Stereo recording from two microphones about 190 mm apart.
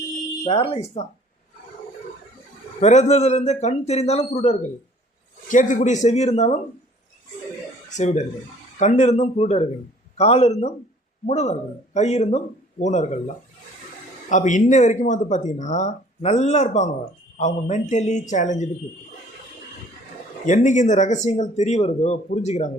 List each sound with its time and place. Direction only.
0.4 s speech: 30° left (ahead or behind)
2.8 s speech: 35° left (ahead or behind)
7.9 s speech: 40° left (ahead or behind)
20.4 s speech: 40° left (ahead or behind)